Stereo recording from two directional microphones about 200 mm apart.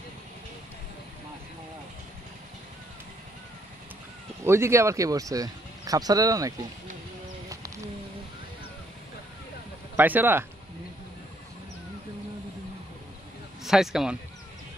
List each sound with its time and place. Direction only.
4.5 s speech: 15° right (ahead or behind)
7.4 s bird: 15° right (ahead or behind)
9.9 s speech: 10° right (ahead or behind)
13.7 s speech: centre (ahead or behind)